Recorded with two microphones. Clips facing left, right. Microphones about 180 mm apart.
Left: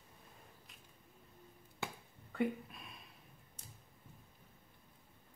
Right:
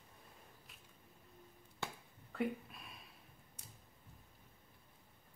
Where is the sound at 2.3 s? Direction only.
Centre (ahead or behind).